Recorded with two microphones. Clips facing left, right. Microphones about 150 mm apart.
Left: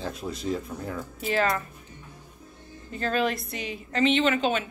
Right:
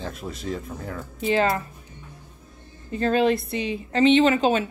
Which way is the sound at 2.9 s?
30° right (ahead or behind).